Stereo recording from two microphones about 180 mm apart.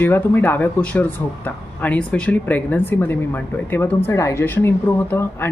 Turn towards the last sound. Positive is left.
turn(degrees=15)  # may be behind; listen again after turning